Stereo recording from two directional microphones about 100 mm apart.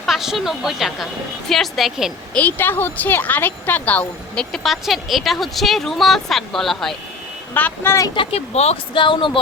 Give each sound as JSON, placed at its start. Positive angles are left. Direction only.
{"t": 0.0, "sound": "speech", "side_deg": -5}
{"t": 2.3, "sound": "speech", "side_deg": 15}
{"t": 4.5, "sound": "speech", "side_deg": 0}
{"t": 7.5, "sound": "speech", "side_deg": 15}
{"t": 8.1, "sound": "speech", "side_deg": 65}
{"t": 9.0, "sound": "speech", "side_deg": 55}